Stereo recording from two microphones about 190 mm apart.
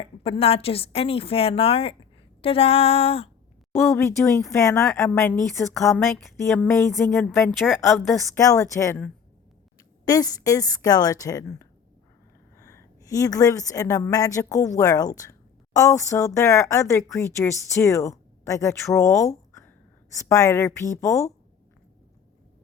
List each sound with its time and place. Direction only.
0.0 s a woman's voice: 30° left (ahead or behind)
3.8 s speech: 10° left (ahead or behind)
8.4 s speech: 15° left (ahead or behind)
10.1 s a woman's voice: 20° left (ahead or behind)